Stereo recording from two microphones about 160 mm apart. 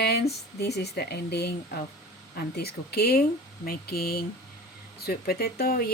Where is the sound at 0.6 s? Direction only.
90° left.